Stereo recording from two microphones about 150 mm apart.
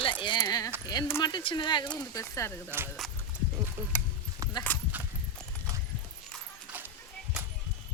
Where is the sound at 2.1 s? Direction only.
20° left (ahead or behind).